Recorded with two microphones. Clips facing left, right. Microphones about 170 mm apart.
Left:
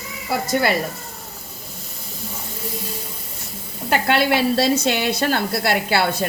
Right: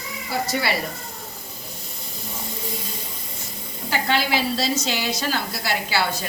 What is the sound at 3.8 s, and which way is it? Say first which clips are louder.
A woman's voice: left 5 dB; 60° left (ahead or behind).